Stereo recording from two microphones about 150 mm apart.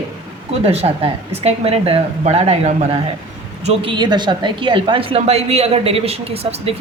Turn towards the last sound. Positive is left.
turn(degrees=-45)  # may be behind; listen again after turning